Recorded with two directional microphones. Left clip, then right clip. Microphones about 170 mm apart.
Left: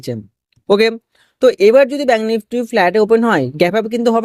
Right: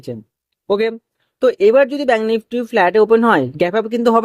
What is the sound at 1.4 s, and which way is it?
Speech, 20° left (ahead or behind).